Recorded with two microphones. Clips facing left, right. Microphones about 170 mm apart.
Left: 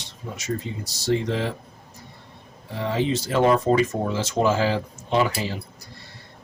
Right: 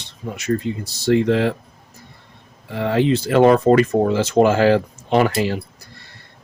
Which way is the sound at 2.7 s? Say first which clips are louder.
Right 6 dB; 65° right (ahead or behind).